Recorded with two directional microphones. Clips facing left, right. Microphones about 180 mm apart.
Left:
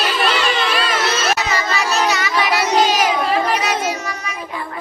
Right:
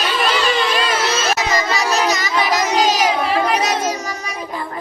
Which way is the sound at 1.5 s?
40° right (ahead or behind).